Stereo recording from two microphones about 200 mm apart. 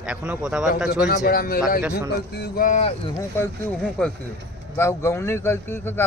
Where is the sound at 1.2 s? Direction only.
45° left (ahead or behind).